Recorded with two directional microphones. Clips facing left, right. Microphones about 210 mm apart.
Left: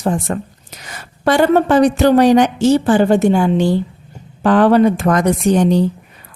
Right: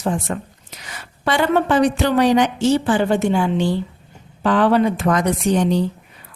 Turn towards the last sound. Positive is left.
turn(degrees=45)  # may be behind; listen again after turning